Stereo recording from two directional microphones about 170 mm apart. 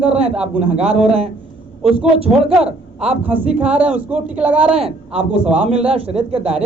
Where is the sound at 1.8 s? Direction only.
35° right (ahead or behind).